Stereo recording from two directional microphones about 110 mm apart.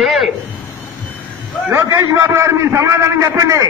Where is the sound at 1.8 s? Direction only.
30° right (ahead or behind).